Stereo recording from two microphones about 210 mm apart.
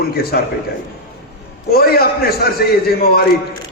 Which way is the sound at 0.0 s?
45° left (ahead or behind).